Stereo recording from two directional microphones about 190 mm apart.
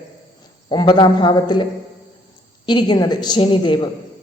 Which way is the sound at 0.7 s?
25° left (ahead or behind).